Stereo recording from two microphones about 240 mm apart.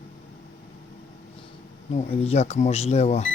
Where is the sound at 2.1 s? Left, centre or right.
Left.